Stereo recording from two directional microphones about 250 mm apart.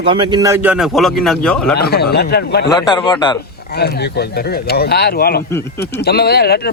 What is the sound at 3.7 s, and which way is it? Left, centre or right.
Speech, left.